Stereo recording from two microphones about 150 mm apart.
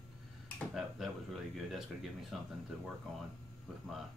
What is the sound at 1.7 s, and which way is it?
Speech, centre (ahead or behind).